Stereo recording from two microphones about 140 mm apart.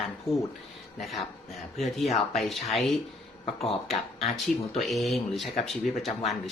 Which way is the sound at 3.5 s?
45° left (ahead or behind).